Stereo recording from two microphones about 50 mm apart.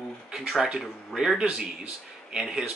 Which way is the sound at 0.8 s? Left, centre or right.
Centre.